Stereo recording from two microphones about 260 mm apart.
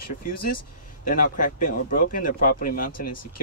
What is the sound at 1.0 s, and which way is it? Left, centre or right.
Speech, left.